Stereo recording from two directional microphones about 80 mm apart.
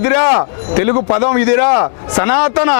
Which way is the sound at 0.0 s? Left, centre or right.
Left.